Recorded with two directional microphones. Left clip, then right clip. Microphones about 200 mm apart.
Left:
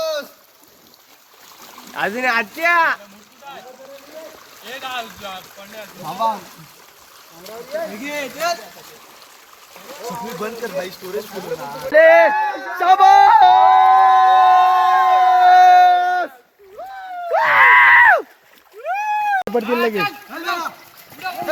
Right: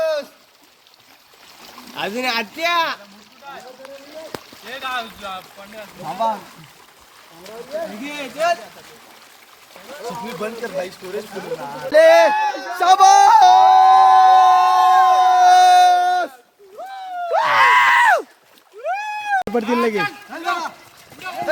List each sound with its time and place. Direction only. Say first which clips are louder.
0.0 s a sound: right 2 dB; 5° right (ahead or behind)
2.0 s speech: left 3 dB; 20° left (ahead or behind)
4.7 s speech: right 2 dB; 15° left (ahead or behind)
6.0 s speech: left 1 dB; 5° right (ahead or behind)
8.2 s speech: right 3 dB; 20° right (ahead or behind)
11.6 s speech: even; 15° right (ahead or behind)
11.9 s speech: left 1 dB; centre (ahead or behind)
12.8 s a sound: left 1 dB; centre (ahead or behind)
17.2 s screaming: left 2 dB; 5° left (ahead or behind)
18.8 s rowboat: left 4 dB; 25° right (ahead or behind)
19.6 s a sound: even; centre (ahead or behind)
21.2 s clip-clop: even; centre (ahead or behind)